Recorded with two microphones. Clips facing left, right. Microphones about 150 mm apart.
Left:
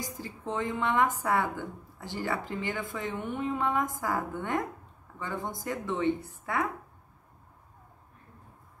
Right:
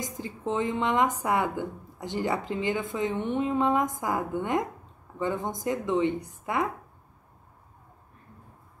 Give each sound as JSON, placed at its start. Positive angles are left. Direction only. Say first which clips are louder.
{"t": 0.0, "sound": "a woman's voice", "louder": "right 4 dB", "side_deg": -20}